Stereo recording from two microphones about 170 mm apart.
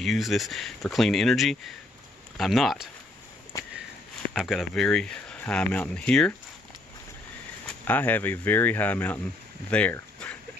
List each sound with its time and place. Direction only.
0.0 s speech: centre (ahead or behind)
3.5 s walk: 20° left (ahead or behind)
4.3 s speech: centre (ahead or behind)
7.6 s speech: 10° left (ahead or behind)